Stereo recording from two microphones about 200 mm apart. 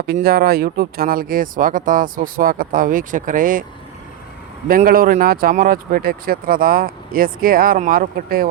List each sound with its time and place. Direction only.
0.0 s speech: 50° right (ahead or behind)
4.7 s speech: 45° right (ahead or behind)